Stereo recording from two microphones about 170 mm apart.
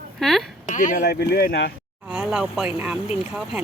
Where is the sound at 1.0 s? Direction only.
75° left (ahead or behind).